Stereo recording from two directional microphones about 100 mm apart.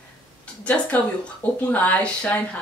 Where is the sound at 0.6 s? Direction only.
15° left (ahead or behind).